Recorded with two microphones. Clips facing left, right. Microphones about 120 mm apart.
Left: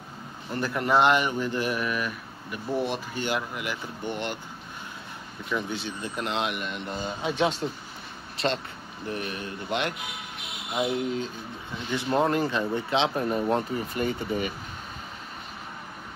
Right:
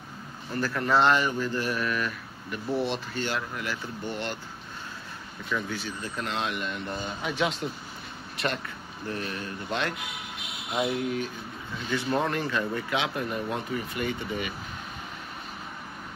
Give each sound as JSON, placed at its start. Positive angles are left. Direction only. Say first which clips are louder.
{"t": 0.5, "sound": "speech", "louder": "left 1 dB", "side_deg": 20}
{"t": 5.5, "sound": "speech", "louder": "left 1 dB", "side_deg": 20}
{"t": 7.2, "sound": "speech", "louder": "left 3 dB", "side_deg": 30}